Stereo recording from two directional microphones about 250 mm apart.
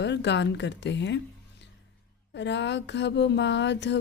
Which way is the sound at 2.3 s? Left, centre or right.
Left.